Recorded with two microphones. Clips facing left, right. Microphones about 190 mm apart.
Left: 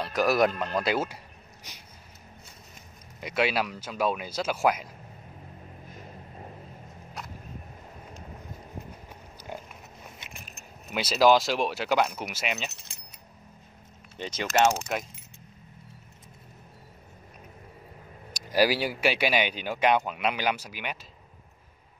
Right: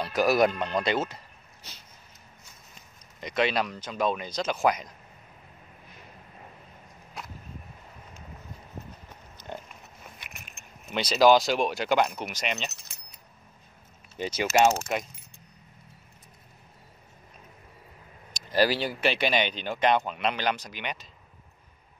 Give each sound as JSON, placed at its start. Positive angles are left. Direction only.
{"t": 0.0, "sound": "speech", "side_deg": 0}
{"t": 3.2, "sound": "speech", "side_deg": 5}
{"t": 5.9, "sound": "vehicle", "side_deg": 35}
{"t": 10.1, "sound": "a sound", "side_deg": 25}
{"t": 10.9, "sound": "speech", "side_deg": 5}
{"t": 14.1, "sound": "speech", "side_deg": -10}
{"t": 18.3, "sound": "speech", "side_deg": 10}